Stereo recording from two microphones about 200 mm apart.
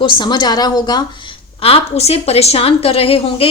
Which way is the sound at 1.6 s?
30° left (ahead or behind).